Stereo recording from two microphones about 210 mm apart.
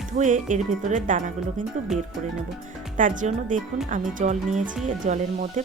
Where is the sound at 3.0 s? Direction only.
40° right (ahead or behind).